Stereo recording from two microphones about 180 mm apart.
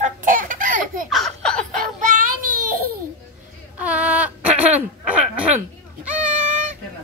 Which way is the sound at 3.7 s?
10° right (ahead or behind).